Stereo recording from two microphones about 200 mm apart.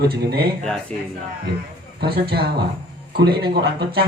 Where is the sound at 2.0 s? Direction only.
50° right (ahead or behind).